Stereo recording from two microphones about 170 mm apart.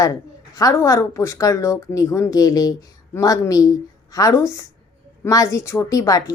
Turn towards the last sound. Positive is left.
turn(degrees=20)  # may be behind; listen again after turning